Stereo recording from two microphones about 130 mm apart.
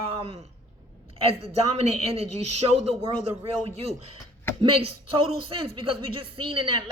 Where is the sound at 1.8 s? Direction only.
55° right (ahead or behind).